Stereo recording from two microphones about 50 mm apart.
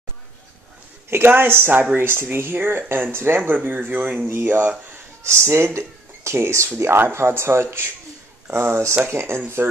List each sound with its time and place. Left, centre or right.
1.1 s speech: right
5.2 s speech: right
6.8 s speech: right